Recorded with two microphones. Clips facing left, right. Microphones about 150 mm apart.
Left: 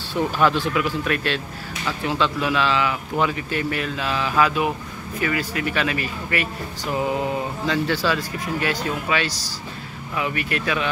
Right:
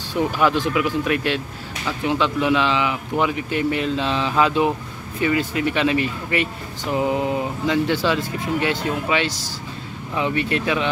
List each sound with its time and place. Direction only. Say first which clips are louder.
0.1 s speech: right 1 dB; 15° right (ahead or behind)